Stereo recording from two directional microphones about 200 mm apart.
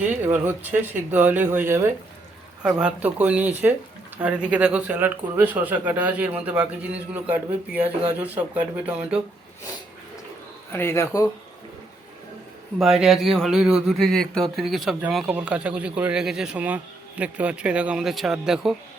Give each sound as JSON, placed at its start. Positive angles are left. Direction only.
{"t": 0.3, "sound": "speech", "side_deg": -10}
{"t": 10.7, "sound": "speech", "side_deg": 10}
{"t": 12.8, "sound": "speech", "side_deg": 0}